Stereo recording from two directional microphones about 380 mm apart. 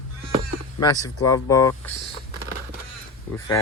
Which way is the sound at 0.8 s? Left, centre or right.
Centre.